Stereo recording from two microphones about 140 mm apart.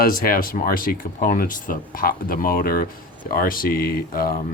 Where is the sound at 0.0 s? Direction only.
90° left.